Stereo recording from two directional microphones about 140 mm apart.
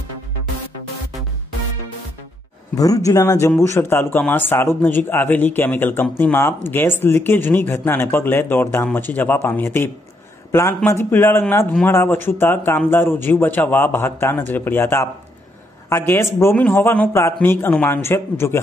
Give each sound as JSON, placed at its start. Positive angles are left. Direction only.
{"t": 2.7, "sound": "speech", "side_deg": 25}